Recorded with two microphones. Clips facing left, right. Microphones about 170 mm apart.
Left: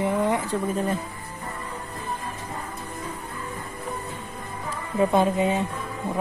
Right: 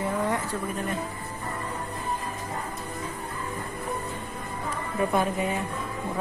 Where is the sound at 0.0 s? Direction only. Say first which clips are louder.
Left 4 dB; 20° left (ahead or behind).